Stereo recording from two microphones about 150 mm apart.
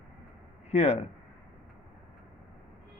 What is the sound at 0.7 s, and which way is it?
Speech, 45° left (ahead or behind).